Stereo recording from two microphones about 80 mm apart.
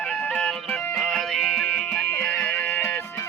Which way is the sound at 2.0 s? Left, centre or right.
Centre.